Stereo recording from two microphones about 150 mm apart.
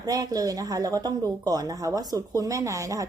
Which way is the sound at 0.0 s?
25° right (ahead or behind).